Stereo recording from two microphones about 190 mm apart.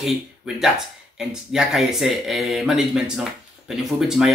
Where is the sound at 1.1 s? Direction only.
5° right (ahead or behind).